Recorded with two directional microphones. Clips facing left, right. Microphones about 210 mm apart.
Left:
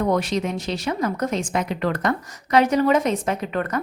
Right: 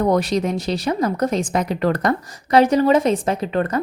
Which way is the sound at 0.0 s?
35° right (ahead or behind).